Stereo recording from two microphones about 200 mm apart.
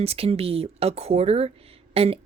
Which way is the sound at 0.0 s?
30° right (ahead or behind).